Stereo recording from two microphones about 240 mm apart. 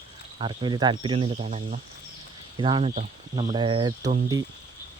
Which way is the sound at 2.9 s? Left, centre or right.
Right.